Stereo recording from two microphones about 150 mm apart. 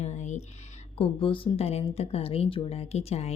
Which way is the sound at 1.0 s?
35° left (ahead or behind).